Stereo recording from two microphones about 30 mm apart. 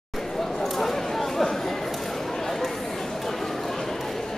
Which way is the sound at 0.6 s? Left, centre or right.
Centre.